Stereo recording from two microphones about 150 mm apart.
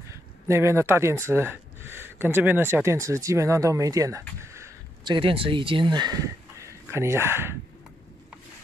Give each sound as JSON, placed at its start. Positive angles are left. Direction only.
{"t": 0.1, "sound": "speech", "side_deg": -20}
{"t": 4.5, "sound": "a sound", "side_deg": -20}
{"t": 5.0, "sound": "speech", "side_deg": -35}
{"t": 6.6, "sound": "speech", "side_deg": -20}